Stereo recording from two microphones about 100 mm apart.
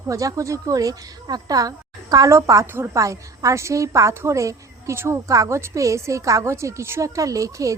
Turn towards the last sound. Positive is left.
turn(degrees=-35)  # may be behind; listen again after turning